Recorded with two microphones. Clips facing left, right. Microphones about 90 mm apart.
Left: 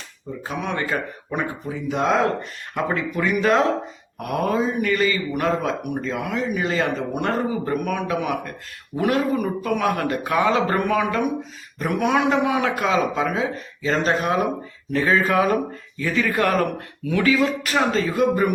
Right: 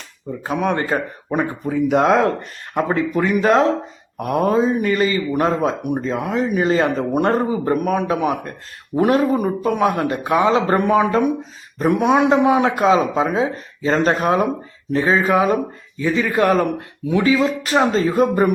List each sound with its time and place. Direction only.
0.4 s speech: 45° right (ahead or behind)
1.6 s speech: 60° right (ahead or behind)
2.4 s speech: 35° right (ahead or behind)
14.9 s speech: 25° right (ahead or behind)